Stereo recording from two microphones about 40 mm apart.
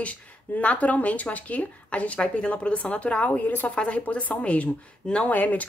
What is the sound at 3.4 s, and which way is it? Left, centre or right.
Speech, left.